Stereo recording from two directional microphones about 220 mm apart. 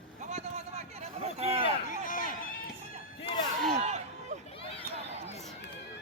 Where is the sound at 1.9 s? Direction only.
40° left (ahead or behind).